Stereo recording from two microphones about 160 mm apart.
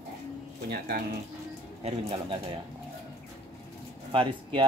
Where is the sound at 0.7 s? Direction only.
70° right (ahead or behind).